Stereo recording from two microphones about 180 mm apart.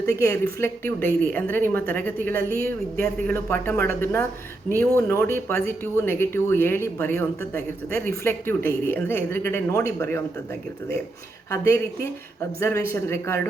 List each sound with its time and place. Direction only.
0.6 s a woman's voice: 10° left (ahead or behind)
11.5 s a woman's voice: 15° left (ahead or behind)